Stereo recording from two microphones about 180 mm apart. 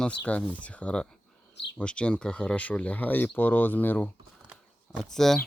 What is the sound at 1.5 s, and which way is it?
Speech, 70° left (ahead or behind).